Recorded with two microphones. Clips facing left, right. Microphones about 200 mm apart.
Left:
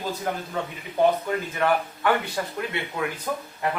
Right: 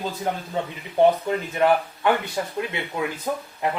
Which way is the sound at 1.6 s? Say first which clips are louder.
Right 5 dB; 20° right (ahead or behind).